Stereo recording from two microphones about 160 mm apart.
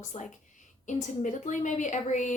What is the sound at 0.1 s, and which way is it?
Speech, 45° left (ahead or behind).